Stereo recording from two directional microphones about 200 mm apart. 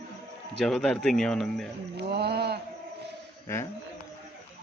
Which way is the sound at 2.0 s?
55° right (ahead or behind).